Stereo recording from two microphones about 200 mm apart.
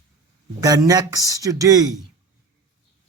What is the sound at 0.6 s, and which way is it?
Speech, 15° right (ahead or behind).